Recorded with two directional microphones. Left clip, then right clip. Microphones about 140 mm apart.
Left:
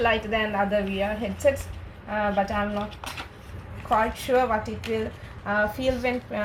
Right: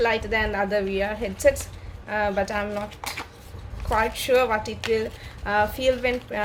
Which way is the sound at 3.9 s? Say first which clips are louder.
Right 1 dB; 65° right (ahead or behind).